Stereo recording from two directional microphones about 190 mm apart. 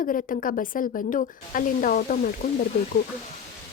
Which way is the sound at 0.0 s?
45° left (ahead or behind).